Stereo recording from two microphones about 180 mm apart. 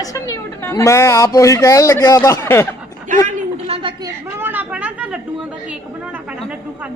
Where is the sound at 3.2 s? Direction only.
35° right (ahead or behind).